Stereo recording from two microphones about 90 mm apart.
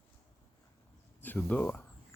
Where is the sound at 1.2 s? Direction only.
20° left (ahead or behind).